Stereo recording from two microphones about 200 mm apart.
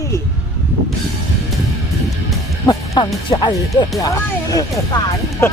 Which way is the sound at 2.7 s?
20° left (ahead or behind).